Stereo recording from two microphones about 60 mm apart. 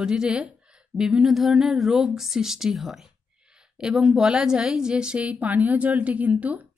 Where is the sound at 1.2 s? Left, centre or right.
Centre.